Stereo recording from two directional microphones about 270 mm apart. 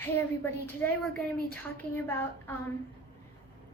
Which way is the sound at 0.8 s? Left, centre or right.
Centre.